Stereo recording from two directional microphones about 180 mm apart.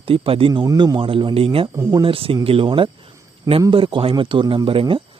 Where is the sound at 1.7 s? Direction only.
15° right (ahead or behind).